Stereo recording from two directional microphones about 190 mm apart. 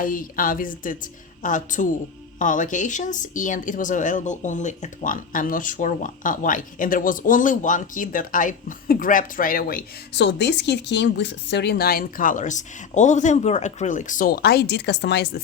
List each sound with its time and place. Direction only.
0.0 s speech: 45° left (ahead or behind); by 15.3 s 65° left (ahead or behind)